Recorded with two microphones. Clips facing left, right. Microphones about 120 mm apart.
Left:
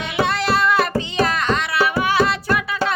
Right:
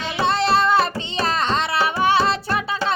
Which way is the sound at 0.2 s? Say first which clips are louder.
Right 1 dB; 25° right (ahead or behind).